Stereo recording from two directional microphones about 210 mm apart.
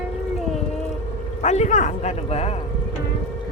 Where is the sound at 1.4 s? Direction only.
35° left (ahead or behind).